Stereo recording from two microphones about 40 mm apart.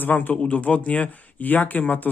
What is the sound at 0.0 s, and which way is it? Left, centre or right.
Speech, left.